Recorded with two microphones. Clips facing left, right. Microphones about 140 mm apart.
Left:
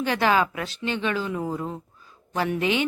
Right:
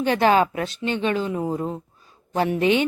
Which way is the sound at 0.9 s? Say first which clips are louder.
Right 3 dB; 20° right (ahead or behind).